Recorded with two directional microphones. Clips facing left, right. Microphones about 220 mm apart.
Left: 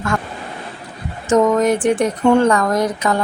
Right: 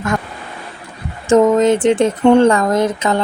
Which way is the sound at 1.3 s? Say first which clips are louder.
Right 3 dB; 25° right (ahead or behind).